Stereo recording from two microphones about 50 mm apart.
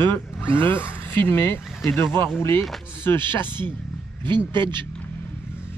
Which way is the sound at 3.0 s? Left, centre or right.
Left.